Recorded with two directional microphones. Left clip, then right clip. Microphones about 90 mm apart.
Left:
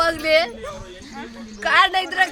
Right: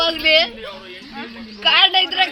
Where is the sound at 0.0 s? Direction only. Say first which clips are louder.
Right 2 dB; 35° left (ahead or behind).